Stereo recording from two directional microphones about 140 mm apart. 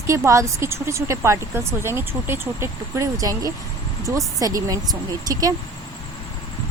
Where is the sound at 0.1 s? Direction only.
20° right (ahead or behind).